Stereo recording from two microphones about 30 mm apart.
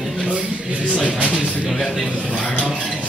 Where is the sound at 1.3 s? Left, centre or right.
Left.